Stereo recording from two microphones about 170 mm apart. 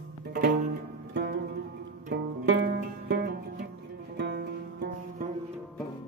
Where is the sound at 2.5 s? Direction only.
90° right; by 5.3 s 70° right (ahead or behind).